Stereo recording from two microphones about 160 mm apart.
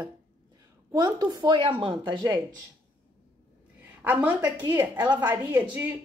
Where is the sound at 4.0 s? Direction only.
10° right (ahead or behind).